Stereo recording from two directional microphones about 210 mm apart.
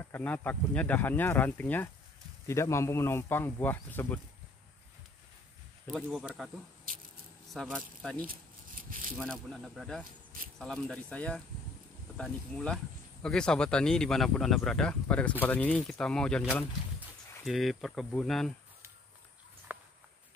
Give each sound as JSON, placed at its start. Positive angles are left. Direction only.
{"t": 0.0, "sound": "speech", "side_deg": 10}
{"t": 5.9, "sound": "speech", "side_deg": 0}
{"t": 7.5, "sound": "speech", "side_deg": 0}
{"t": 8.2, "sound": "a sound", "side_deg": -40}
{"t": 9.2, "sound": "speech", "side_deg": 5}
{"t": 19.7, "sound": "a sound", "side_deg": -10}